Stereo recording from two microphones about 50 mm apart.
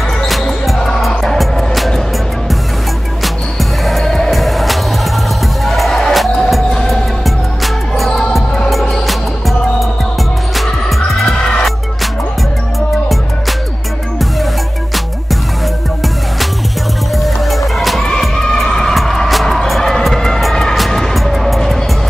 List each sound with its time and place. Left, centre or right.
0.3 s basketball bounce: centre
1.0 s music: centre
4.0 s music: centre
17.1 s music: centre